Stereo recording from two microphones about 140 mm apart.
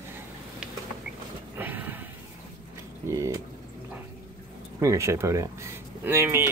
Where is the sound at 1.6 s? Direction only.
15° right (ahead or behind).